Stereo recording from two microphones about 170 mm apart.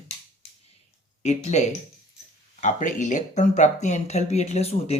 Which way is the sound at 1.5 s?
40° left (ahead or behind).